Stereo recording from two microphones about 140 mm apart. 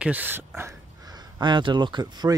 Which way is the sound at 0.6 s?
25° right (ahead or behind).